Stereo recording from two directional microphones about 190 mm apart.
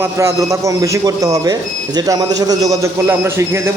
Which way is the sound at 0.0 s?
15° right (ahead or behind).